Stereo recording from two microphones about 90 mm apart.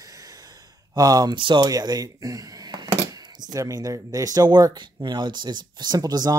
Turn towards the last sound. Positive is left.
turn(degrees=-45)  # may be behind; listen again after turning